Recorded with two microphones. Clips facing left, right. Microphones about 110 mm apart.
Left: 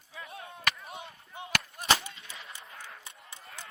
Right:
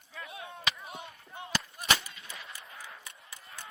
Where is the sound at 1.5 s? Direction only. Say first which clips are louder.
Left 1 dB; 60° left (ahead or behind).